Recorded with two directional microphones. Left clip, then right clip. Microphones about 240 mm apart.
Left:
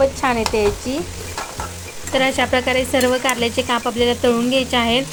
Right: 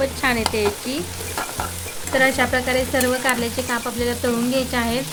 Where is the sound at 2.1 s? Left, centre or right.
Centre.